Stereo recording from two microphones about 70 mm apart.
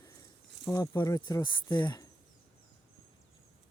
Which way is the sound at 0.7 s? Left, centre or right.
Left.